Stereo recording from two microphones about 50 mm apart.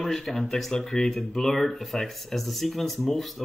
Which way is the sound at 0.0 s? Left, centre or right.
Centre.